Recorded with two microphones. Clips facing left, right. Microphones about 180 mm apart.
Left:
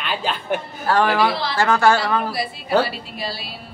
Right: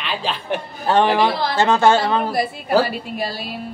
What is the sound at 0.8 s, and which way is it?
A man's voice, 20° right (ahead or behind).